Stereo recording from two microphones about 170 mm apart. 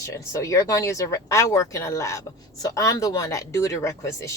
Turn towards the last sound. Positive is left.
turn(degrees=15)  # may be behind; listen again after turning